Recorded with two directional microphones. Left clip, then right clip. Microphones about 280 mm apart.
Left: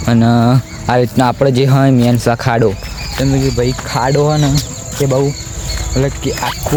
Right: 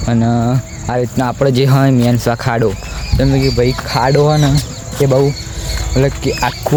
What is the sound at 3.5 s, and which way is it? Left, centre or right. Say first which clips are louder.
Speech: right 2 dB; centre.